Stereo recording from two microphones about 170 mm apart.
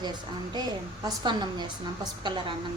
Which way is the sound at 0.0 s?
25° right (ahead or behind).